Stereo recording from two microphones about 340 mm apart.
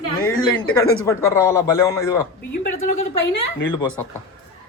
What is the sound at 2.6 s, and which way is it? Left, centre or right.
Speech, left.